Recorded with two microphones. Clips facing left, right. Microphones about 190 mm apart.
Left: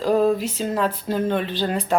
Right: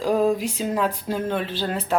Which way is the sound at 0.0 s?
10° right (ahead or behind).